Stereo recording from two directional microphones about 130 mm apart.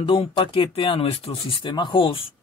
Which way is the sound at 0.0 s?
40° left (ahead or behind).